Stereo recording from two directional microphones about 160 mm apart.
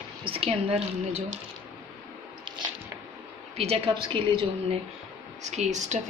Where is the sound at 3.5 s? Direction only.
40° right (ahead or behind).